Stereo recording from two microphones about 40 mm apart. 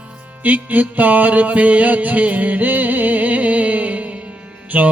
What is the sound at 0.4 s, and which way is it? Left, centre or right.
Music, right.